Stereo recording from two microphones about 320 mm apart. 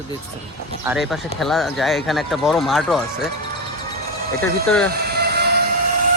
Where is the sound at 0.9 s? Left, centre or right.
Centre.